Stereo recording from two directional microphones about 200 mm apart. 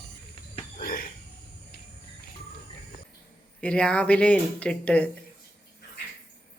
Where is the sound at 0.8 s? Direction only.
45° left (ahead or behind).